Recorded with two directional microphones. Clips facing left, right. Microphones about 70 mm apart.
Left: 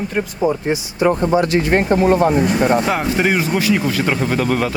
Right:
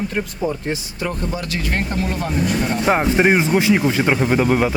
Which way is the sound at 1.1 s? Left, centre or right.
Left.